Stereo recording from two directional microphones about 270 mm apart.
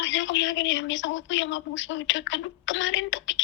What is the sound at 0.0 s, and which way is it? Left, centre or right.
Speech, left.